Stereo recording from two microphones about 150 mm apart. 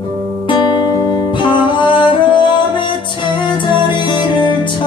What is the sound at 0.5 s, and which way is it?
Music, 30° left (ahead or behind).